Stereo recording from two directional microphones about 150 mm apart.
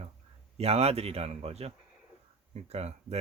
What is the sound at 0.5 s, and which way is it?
Speech, 45° right (ahead or behind).